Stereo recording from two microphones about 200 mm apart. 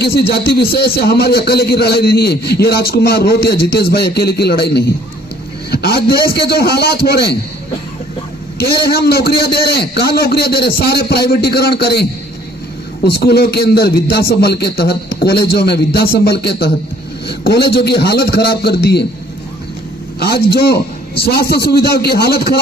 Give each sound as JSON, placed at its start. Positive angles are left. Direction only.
{"t": 0.0, "sound": "speech", "side_deg": 55}
{"t": 8.5, "sound": "speech", "side_deg": 50}
{"t": 13.1, "sound": "a man's voice", "side_deg": 55}
{"t": 20.1, "sound": "speech", "side_deg": 50}